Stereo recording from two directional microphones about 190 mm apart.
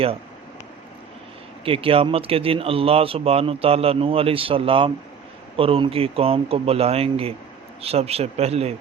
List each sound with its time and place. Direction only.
1.6 s a man's voice: 30° right (ahead or behind)